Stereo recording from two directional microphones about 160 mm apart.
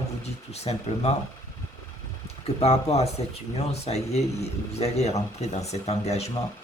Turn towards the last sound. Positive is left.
turn(degrees=40)  # may be behind; listen again after turning